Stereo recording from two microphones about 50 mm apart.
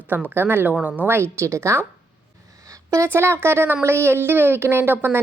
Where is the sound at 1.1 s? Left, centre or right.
Right.